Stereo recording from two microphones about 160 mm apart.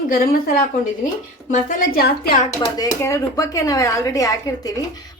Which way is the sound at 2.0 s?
70° left (ahead or behind).